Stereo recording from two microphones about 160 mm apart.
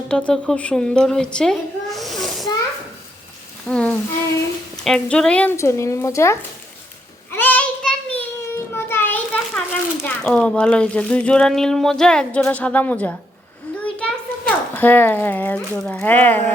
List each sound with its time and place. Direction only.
0.1 s a woman's voice: 5° left (ahead or behind)
3.7 s a sound: 5° left (ahead or behind)
4.8 s speech: 5° left (ahead or behind)
7.3 s child singing: 10° left (ahead or behind)
8.7 s a child's voice: 15° left (ahead or behind)